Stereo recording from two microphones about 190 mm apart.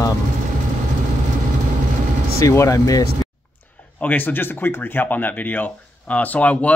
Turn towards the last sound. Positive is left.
turn(degrees=5)  # may be behind; listen again after turning